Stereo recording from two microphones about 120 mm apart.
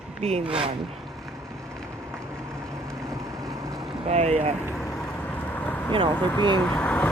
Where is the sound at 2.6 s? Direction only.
25° right (ahead or behind).